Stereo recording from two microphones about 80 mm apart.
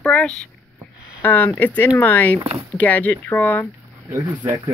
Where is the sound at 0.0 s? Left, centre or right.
Centre.